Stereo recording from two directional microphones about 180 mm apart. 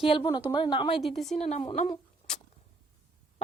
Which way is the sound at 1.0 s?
Centre (ahead or behind).